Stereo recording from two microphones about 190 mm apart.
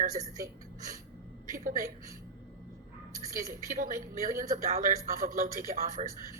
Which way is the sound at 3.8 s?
45° right (ahead or behind).